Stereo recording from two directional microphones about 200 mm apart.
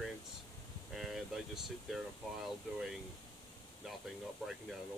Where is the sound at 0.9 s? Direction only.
Centre (ahead or behind).